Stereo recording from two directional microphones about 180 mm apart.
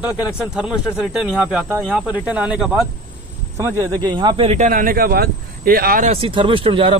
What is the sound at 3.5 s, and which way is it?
Speech, 15° right (ahead or behind).